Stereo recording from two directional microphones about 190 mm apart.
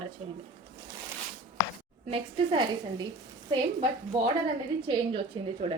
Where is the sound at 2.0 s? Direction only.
30° right (ahead or behind).